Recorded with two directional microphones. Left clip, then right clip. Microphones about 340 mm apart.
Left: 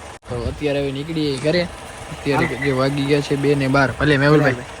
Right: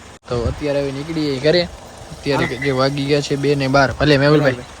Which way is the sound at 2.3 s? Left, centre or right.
Centre.